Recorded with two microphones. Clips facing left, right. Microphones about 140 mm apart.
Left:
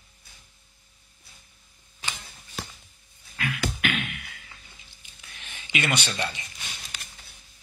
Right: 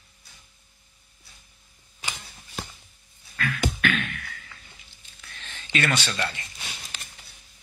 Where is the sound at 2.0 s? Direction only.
15° right (ahead or behind).